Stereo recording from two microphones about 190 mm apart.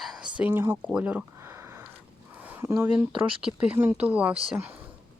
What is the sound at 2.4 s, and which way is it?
Speech, 10° right (ahead or behind).